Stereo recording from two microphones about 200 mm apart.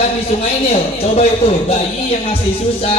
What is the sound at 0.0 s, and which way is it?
A man's voice, 30° left (ahead or behind).